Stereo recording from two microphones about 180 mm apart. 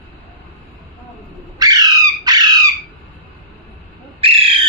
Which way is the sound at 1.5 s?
20° right (ahead or behind).